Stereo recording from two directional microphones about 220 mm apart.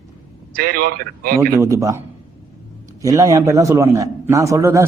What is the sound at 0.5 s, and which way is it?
Speech, 40° right (ahead or behind).